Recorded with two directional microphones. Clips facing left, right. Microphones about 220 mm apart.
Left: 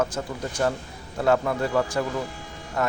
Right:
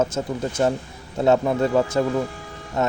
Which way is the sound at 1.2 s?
20° right (ahead or behind).